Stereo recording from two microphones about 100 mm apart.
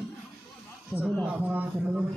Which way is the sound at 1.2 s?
15° right (ahead or behind).